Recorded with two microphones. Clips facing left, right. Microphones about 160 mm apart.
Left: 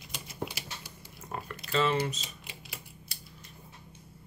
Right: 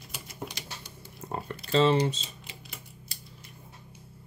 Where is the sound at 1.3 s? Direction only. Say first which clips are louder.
Right 5 dB; 30° right (ahead or behind).